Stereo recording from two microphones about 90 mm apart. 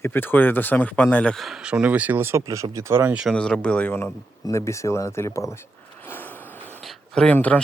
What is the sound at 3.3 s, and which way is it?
Speech, 10° left (ahead or behind).